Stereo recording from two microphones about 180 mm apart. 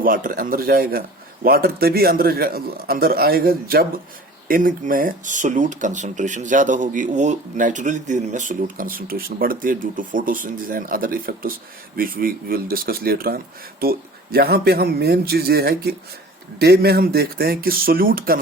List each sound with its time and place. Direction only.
0.0 s a man's voice: 50° right (ahead or behind)